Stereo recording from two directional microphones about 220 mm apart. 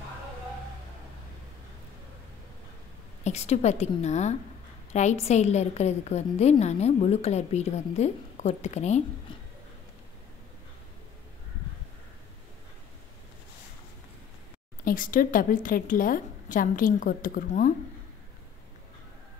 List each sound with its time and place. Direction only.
3.3 s a woman's voice: 30° left (ahead or behind)
14.9 s a woman's voice: 40° left (ahead or behind)